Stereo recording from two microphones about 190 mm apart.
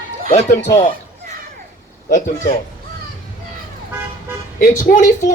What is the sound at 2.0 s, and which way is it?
Speech, 45° left (ahead or behind).